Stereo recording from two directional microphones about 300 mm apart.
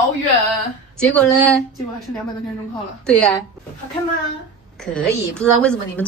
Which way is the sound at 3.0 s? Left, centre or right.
Centre.